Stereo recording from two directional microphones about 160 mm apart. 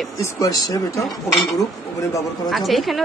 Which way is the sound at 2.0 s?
20° left (ahead or behind).